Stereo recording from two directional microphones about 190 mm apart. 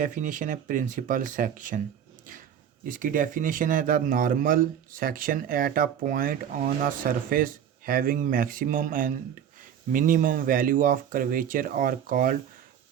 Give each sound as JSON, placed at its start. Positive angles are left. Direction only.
{"t": 0.0, "sound": "a man's voice", "side_deg": -40}
{"t": 2.8, "sound": "a man's voice", "side_deg": -45}